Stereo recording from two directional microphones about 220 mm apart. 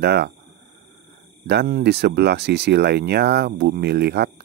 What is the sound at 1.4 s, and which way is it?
Speech, 45° right (ahead or behind).